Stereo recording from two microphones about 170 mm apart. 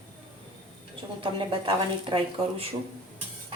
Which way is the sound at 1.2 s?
30° right (ahead or behind).